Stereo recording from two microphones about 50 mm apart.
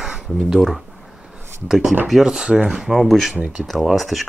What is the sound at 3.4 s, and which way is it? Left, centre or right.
Speech, centre.